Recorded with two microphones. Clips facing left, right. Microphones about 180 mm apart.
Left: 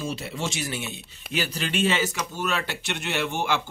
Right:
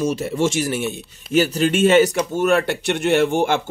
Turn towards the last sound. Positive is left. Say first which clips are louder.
# right 10 dB
turn(degrees=-50)  # may be behind; listen again after turning